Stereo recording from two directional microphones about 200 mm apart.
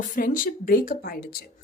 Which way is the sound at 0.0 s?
45° left (ahead or behind).